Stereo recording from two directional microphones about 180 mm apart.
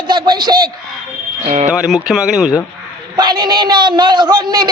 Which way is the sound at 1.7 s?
5° right (ahead or behind).